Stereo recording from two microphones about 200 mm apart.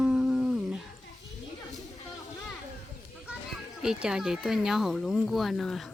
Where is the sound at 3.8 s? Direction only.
5° right (ahead or behind).